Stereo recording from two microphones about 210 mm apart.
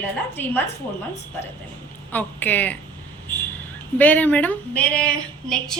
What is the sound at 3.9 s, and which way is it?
A woman's voice, 10° left (ahead or behind).